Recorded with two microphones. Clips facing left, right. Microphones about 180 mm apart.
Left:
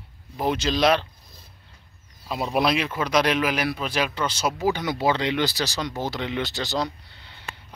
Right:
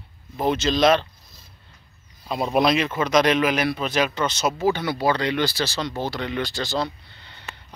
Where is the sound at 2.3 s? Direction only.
5° left (ahead or behind).